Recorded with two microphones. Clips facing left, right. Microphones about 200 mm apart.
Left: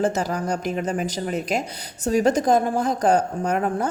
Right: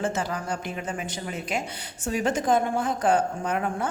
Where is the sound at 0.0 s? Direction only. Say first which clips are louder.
Left 5 dB; 40° left (ahead or behind).